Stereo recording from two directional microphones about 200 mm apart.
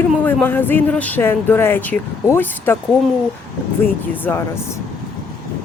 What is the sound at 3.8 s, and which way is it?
Speech, 10° left (ahead or behind).